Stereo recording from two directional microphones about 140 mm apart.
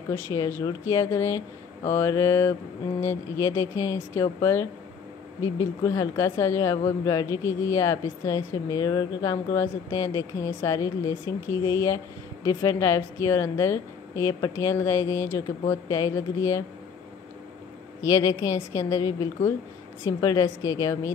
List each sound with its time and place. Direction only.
0.1 s a woman's voice: 20° left (ahead or behind)
18.0 s a woman's voice: 25° left (ahead or behind)